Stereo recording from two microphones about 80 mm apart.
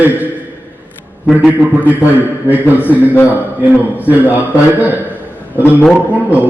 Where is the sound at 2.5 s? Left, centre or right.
Right.